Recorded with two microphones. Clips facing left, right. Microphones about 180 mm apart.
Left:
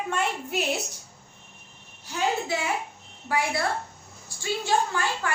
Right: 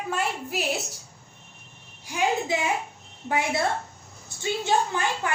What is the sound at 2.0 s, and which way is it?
A woman's voice, 15° right (ahead or behind).